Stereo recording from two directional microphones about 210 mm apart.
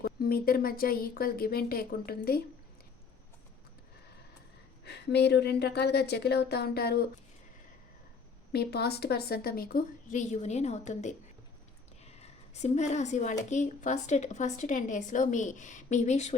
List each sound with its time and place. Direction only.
0.0 s a woman's voice: 45° left (ahead or behind)
4.9 s a woman's voice: 55° left (ahead or behind)
8.5 s a woman's voice: 50° left (ahead or behind); by 16.3 s 35° left (ahead or behind)